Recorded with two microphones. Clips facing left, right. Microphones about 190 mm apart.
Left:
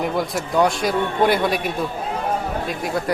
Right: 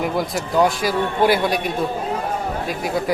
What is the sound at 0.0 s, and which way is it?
A man's voice, centre (ahead or behind).